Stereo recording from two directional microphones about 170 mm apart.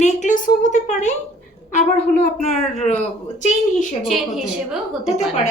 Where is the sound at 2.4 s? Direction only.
40° left (ahead or behind).